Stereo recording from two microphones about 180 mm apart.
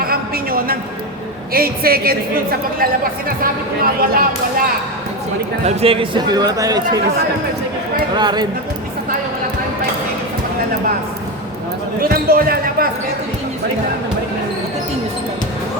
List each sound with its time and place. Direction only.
0.0 s a sound: 55° right (ahead or behind)
1.5 s speech: 55° right (ahead or behind)
5.6 s a man's voice: 30° right (ahead or behind)
8.1 s a man's voice: 25° right (ahead or behind)
11.9 s speech: 55° right (ahead or behind)